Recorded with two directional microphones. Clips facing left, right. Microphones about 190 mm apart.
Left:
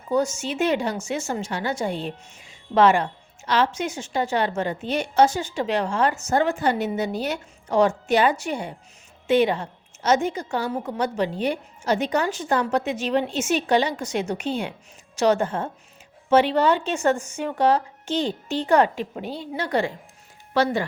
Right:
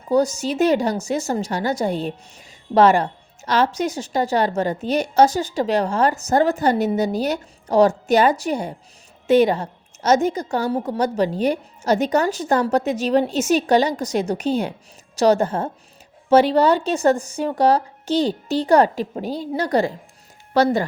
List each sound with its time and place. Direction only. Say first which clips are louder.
0.1 s speech: right 4 dB; 35° right (ahead or behind)